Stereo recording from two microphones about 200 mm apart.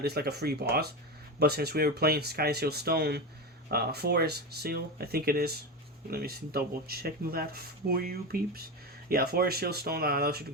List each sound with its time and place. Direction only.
0.0 s speech: 55° right (ahead or behind)